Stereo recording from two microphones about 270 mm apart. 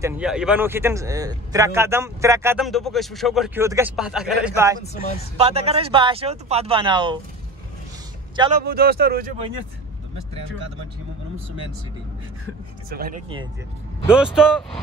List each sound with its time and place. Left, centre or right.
0.0 s a man's voice: centre
5.4 s speech: right
8.5 s speech: right
12.9 s speech: right
14.1 s a man's voice: centre